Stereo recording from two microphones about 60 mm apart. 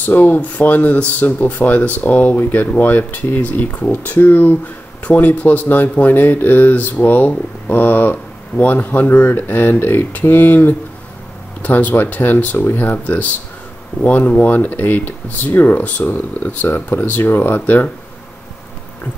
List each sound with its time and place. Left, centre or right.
0.0 s speech: left